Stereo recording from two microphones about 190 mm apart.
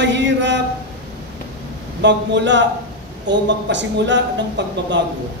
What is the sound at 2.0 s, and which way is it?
Speech, 65° right (ahead or behind).